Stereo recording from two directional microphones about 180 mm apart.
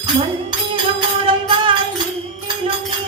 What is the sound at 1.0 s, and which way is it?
Music, 25° right (ahead or behind).